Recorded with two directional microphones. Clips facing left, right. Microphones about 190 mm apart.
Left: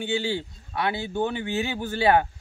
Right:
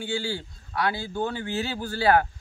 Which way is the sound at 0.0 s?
20° left (ahead or behind).